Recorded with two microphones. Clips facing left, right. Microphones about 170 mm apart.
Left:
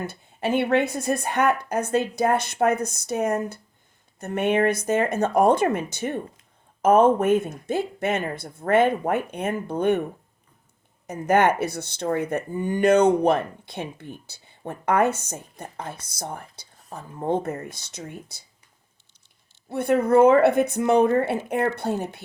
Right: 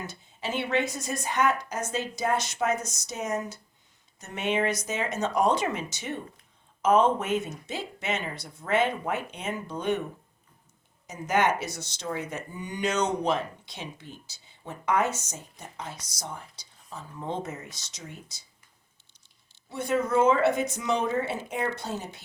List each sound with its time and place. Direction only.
0.0 s speech: 55° left (ahead or behind)
11.0 s speech: 55° left (ahead or behind)
19.7 s speech: 60° left (ahead or behind)